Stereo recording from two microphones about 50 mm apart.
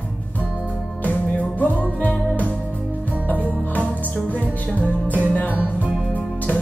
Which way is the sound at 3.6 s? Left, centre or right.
Left.